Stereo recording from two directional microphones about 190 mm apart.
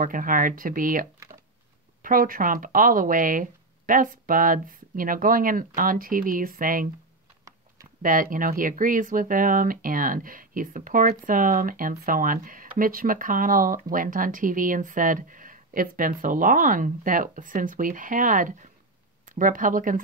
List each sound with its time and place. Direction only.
0.0 s speech: 45° right (ahead or behind)
2.0 s speech: 45° right (ahead or behind)
8.0 s speech: 45° right (ahead or behind)